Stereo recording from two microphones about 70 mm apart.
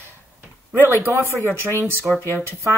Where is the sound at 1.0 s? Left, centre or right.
Right.